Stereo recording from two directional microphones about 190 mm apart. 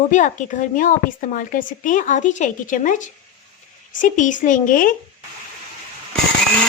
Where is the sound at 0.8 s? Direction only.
45° left (ahead or behind).